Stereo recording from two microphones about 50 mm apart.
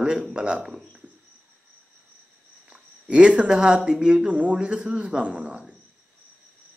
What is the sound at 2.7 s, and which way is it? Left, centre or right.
Speech, right.